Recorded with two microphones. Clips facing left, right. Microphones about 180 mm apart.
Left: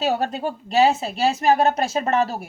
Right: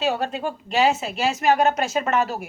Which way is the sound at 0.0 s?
40° left (ahead or behind).